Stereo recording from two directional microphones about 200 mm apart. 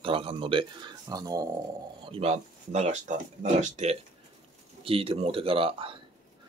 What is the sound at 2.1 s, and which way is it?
Speech, 30° right (ahead or behind).